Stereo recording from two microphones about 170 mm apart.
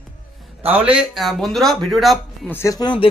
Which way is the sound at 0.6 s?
10° right (ahead or behind).